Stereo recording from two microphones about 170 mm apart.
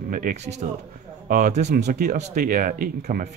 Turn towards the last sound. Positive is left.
turn(degrees=-50)  # may be behind; listen again after turning